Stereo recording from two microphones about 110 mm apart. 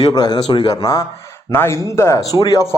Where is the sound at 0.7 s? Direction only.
30° left (ahead or behind).